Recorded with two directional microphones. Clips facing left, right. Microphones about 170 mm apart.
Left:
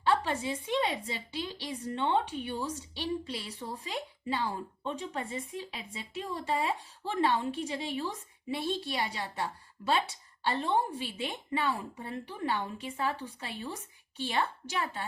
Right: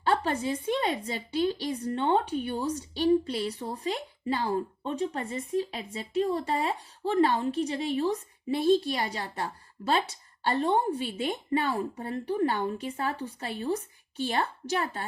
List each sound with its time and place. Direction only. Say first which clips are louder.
0.0 s a woman's voice: right 2 dB; 45° right (ahead or behind)